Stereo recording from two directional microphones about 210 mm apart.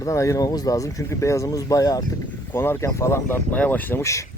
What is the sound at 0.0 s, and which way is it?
Speech, 15° left (ahead or behind).